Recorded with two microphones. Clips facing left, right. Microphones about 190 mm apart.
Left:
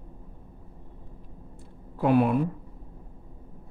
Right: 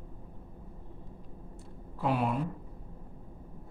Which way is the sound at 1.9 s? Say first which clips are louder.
Left 8 dB; 60° left (ahead or behind).